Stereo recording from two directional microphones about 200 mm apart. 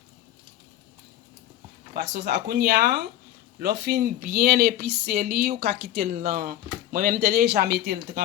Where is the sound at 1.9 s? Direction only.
55° right (ahead or behind).